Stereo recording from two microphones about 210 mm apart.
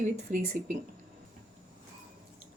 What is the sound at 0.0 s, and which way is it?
Speech, 35° right (ahead or behind).